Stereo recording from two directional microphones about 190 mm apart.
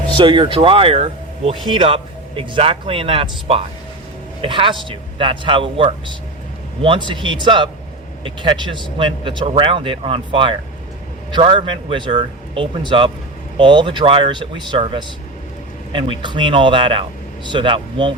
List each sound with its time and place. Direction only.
0.2 s speech: 25° right (ahead or behind)